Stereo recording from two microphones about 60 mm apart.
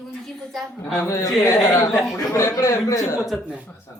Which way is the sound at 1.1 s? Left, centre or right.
Left.